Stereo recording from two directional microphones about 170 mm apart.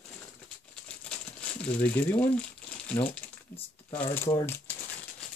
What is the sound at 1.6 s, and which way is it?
Speech, 10° left (ahead or behind).